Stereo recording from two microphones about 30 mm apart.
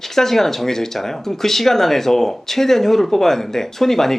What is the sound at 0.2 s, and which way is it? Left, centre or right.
Speech, centre.